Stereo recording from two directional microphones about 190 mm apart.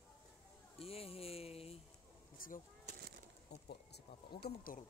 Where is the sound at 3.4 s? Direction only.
60° left (ahead or behind).